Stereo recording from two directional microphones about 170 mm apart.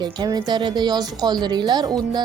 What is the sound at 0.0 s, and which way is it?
Speech, 25° right (ahead or behind).